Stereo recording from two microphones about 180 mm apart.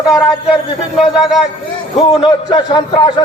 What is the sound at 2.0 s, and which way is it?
A man's voice, 30° left (ahead or behind).